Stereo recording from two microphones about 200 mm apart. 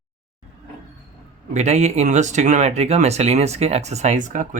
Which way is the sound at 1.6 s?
35° right (ahead or behind).